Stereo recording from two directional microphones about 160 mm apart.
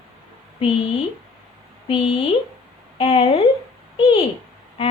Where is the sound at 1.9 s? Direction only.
35° left (ahead or behind).